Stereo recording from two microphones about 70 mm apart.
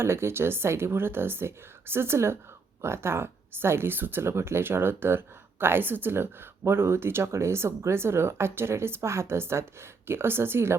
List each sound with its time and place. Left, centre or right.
0.0 s speech: right